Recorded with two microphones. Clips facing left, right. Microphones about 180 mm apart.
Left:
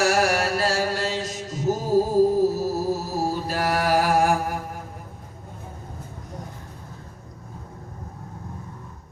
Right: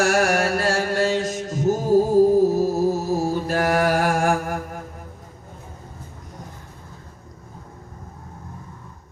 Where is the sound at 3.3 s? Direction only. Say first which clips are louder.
Right 4 dB; 50° right (ahead or behind).